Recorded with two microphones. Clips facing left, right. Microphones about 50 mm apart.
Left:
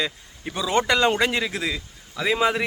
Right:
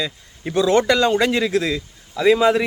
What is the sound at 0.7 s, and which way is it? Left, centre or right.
Speech, left.